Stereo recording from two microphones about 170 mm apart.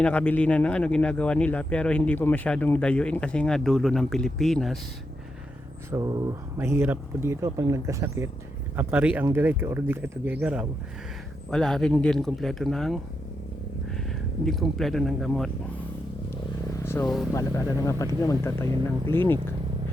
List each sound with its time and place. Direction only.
0.0 s speech: 10° left (ahead or behind)
5.9 s speech: 20° right (ahead or behind)
11.5 s speech: 5° left (ahead or behind)
14.4 s speech: centre (ahead or behind)
16.8 s speech: 15° left (ahead or behind)